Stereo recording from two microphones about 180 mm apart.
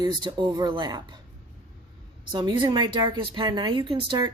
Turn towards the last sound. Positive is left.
turn(degrees=-25)  # may be behind; listen again after turning